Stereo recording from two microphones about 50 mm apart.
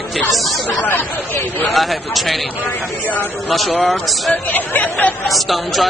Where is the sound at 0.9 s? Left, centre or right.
Left.